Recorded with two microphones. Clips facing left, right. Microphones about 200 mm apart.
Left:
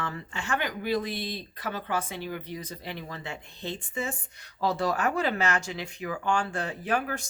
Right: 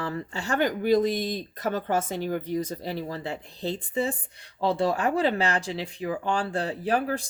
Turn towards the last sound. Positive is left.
turn(degrees=-35)  # may be behind; listen again after turning